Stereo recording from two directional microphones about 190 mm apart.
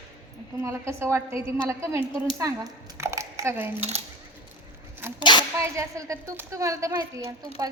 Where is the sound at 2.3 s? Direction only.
15° right (ahead or behind).